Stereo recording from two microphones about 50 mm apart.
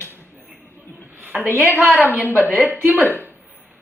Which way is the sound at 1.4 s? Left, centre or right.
Left.